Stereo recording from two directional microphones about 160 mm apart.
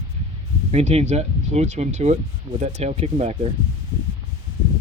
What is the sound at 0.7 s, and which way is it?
Speech, 45° right (ahead or behind).